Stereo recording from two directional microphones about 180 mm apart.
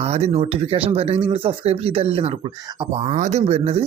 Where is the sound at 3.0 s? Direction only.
40° right (ahead or behind).